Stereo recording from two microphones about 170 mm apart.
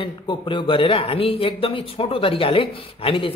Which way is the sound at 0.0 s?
30° left (ahead or behind).